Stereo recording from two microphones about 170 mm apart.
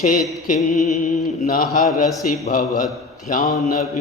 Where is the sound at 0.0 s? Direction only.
50° left (ahead or behind).